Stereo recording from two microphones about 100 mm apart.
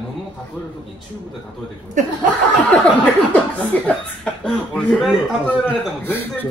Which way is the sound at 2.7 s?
10° left (ahead or behind).